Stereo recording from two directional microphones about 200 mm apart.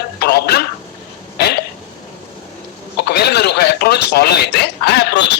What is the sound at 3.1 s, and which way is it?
A man's voice, 55° left (ahead or behind).